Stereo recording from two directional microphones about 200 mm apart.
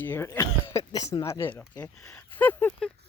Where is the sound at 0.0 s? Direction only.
10° left (ahead or behind).